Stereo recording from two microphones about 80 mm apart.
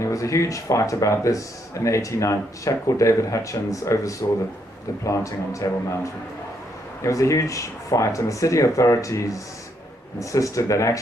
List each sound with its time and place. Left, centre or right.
0.0 s speech: left
7.0 s speech: left